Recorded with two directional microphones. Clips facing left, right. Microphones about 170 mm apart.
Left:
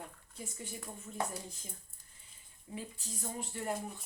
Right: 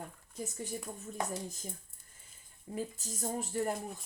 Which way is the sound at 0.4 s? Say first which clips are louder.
Right 6 dB; 40° right (ahead or behind).